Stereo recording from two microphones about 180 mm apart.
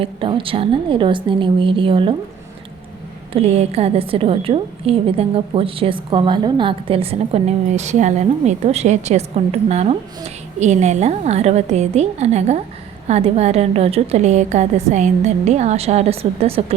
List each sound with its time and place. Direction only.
0.0 s a woman's voice: 30° right (ahead or behind)
3.3 s a woman's voice: 35° right (ahead or behind)